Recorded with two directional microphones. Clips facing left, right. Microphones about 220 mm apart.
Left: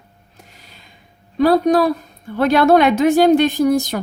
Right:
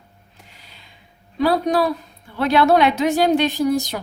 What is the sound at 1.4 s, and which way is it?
Speech, 45° left (ahead or behind).